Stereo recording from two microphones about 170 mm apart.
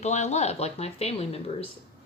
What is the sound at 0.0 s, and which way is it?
A woman's voice, 40° left (ahead or behind).